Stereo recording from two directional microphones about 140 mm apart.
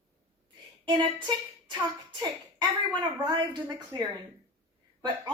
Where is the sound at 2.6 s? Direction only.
30° right (ahead or behind).